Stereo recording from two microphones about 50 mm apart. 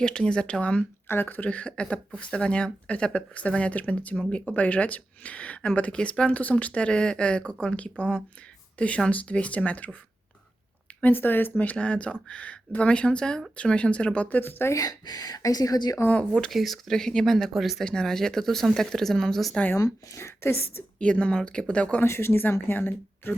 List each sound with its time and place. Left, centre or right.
0.0 s speech: centre
1.0 s speech: left
11.0 s speech: left
11.8 s speech: left
16.0 s speech: left
16.5 s speech: centre
17.8 s speech: centre
19.7 s speech: left
21.0 s speech: left
22.0 s speech: left